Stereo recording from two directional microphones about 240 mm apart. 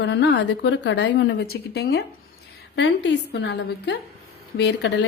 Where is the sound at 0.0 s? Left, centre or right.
Left.